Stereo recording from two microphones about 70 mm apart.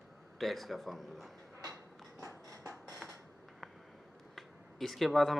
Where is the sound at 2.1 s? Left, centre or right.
Right.